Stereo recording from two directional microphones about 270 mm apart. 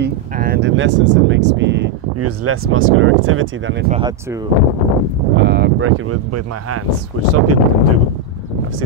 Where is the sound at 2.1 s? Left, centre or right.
Right.